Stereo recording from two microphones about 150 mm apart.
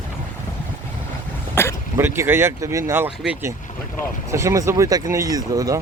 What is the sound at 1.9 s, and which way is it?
Speech, 15° right (ahead or behind).